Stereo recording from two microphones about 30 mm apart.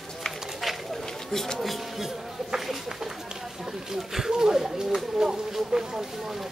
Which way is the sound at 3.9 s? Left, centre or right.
Centre.